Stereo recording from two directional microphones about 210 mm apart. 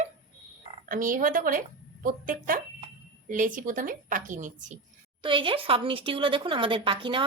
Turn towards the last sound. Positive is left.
turn(degrees=-25)  # may be behind; listen again after turning